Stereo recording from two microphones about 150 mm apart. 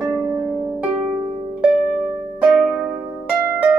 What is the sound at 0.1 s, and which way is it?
Harp, 15° right (ahead or behind).